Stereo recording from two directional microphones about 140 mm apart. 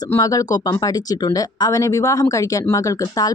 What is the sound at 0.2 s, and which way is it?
Speech, 25° left (ahead or behind).